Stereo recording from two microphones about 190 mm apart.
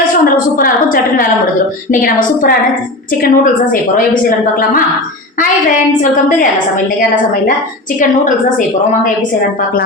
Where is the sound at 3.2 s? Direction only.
45° left (ahead or behind).